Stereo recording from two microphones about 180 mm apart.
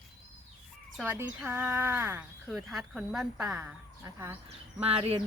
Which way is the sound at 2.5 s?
Centre (ahead or behind).